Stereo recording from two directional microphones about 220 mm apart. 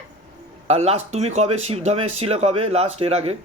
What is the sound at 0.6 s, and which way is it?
Speech, 30° right (ahead or behind).